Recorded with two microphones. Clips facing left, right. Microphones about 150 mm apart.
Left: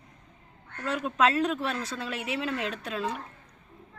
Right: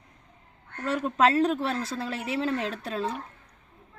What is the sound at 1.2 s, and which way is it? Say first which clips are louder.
Speech: right 3 dB; 35° right (ahead or behind).